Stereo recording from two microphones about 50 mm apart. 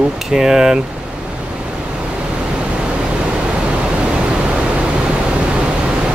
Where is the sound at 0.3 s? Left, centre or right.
Centre.